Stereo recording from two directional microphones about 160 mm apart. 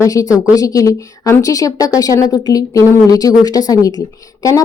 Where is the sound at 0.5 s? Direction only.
20° left (ahead or behind).